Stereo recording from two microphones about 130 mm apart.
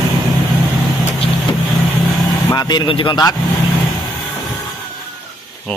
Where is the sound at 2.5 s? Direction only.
35° left (ahead or behind).